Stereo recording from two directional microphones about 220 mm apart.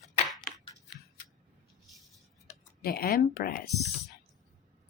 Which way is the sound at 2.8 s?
45° left (ahead or behind).